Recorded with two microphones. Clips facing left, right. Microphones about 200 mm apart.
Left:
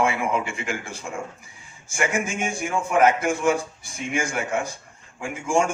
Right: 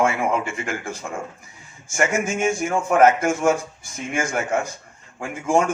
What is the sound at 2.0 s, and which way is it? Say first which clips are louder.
A man's voice: right 4 dB; 50° right (ahead or behind).